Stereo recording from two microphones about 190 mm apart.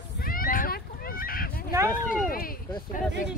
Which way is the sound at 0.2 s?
50° left (ahead or behind).